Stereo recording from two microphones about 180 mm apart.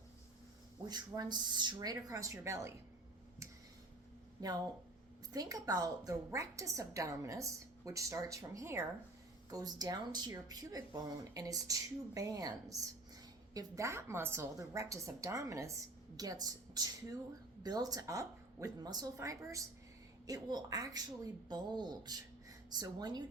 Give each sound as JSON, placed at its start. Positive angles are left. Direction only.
{"t": 0.9, "sound": "speech", "side_deg": -20}
{"t": 4.4, "sound": "a woman's voice", "side_deg": -20}